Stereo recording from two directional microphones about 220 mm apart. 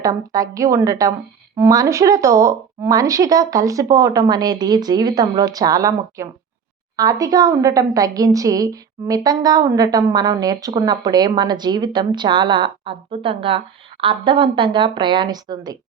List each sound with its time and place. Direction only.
0.0 s a woman's voice: 15° right (ahead or behind)